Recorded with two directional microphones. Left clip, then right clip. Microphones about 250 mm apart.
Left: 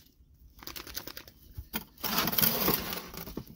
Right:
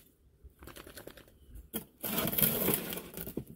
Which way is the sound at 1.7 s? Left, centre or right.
Centre.